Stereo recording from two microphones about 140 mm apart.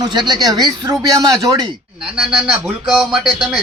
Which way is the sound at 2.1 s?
5° right (ahead or behind).